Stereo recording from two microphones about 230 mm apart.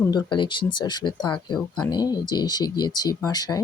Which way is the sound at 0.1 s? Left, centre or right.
Left.